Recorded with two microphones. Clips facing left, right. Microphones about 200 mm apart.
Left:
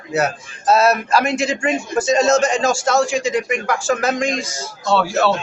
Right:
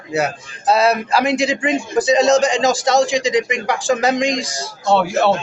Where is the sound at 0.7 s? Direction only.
15° right (ahead or behind).